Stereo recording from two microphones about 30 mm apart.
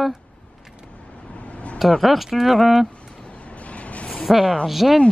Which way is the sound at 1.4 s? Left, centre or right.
Left.